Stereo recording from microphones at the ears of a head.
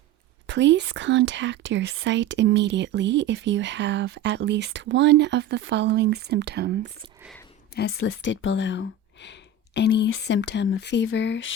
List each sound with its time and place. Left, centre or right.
0.4 s speech: right
7.8 s speech: left